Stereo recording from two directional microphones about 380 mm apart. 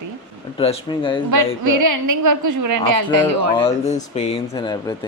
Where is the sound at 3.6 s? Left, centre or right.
Centre.